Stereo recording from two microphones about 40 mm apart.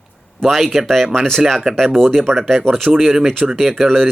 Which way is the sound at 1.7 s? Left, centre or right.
Centre.